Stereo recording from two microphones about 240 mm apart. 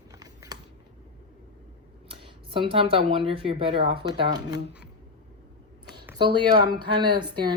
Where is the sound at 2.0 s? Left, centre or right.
Right.